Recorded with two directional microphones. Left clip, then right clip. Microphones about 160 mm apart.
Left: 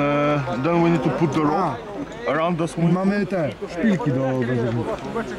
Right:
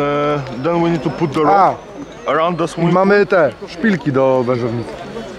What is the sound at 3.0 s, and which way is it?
Speech, 35° right (ahead or behind).